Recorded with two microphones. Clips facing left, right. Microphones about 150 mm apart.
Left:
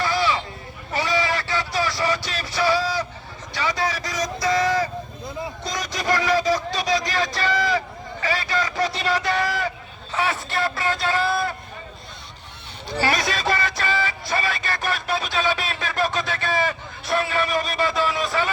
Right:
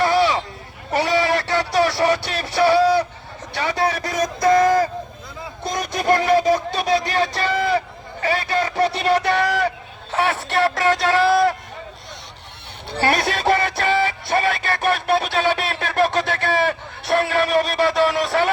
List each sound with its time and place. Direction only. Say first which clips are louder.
0.0 s a sound: right 5 dB; 65° right (ahead or behind)
0.9 s music: right 5 dB; 65° right (ahead or behind)
8.8 s a man's voice: right 7 dB; 60° right (ahead or behind)
13.0 s music: right 3 dB; 60° right (ahead or behind)